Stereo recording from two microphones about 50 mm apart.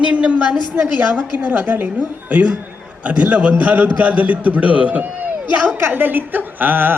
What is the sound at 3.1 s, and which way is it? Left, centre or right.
A man's voice, right.